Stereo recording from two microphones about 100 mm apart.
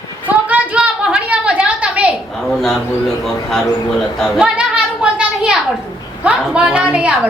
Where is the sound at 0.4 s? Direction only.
15° right (ahead or behind).